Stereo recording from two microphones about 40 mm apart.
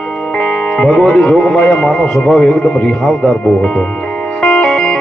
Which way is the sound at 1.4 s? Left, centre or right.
Left.